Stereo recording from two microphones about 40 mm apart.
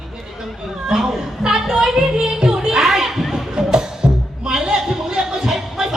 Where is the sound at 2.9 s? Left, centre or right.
Centre.